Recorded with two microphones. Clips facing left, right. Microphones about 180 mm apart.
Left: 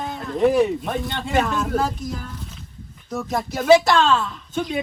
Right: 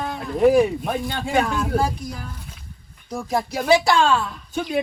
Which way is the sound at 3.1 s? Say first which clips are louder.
Right 1 dB; centre (ahead or behind).